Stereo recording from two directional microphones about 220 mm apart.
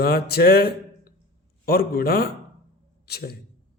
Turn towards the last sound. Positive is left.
turn(degrees=45)  # may be behind; listen again after turning